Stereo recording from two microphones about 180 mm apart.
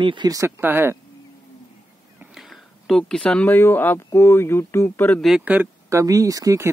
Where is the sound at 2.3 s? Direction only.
Centre (ahead or behind).